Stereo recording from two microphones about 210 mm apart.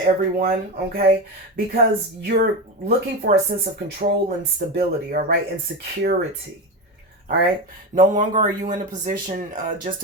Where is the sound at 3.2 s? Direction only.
55° right (ahead or behind).